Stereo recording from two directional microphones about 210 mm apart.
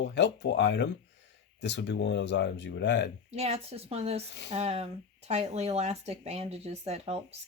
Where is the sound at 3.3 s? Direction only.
30° right (ahead or behind).